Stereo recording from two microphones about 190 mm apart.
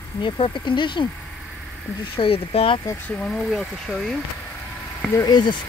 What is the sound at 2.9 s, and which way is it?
Speech, 5° left (ahead or behind).